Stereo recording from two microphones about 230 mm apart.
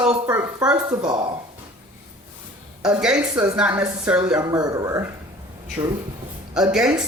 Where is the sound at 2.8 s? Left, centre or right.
Centre.